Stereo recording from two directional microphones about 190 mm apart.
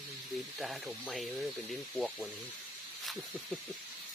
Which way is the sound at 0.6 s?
Centre (ahead or behind).